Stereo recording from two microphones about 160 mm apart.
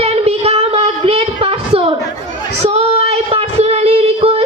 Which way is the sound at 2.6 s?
40° right (ahead or behind).